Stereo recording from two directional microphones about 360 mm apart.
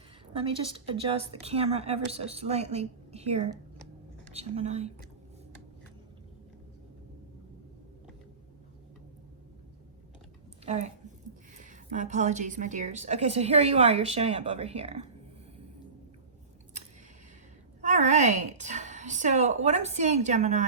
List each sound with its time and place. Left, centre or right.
0.3 s speech: centre
10.7 s a woman's voice: centre
17.7 s a woman's voice: centre